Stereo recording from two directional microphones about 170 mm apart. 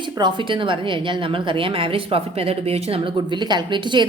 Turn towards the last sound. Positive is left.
turn(degrees=-25)  # may be behind; listen again after turning